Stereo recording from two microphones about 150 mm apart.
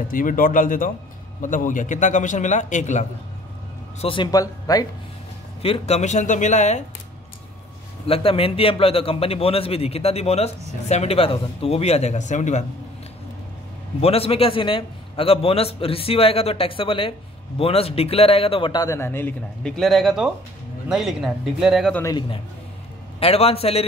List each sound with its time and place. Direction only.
0.1 s a man's voice: 65° left (ahead or behind)
4.0 s a man's voice: 35° left (ahead or behind)
5.6 s speech: 45° left (ahead or behind)
8.1 s a man's voice: 40° left (ahead or behind)
14.0 s a man's voice: 40° left (ahead or behind); by 21.9 s centre (ahead or behind)
23.1 s a man's voice: 40° left (ahead or behind)